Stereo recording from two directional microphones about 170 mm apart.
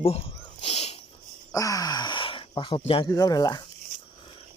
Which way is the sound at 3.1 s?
20° left (ahead or behind).